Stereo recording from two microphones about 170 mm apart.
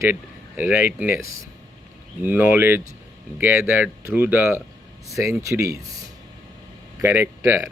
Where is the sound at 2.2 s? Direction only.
10° right (ahead or behind).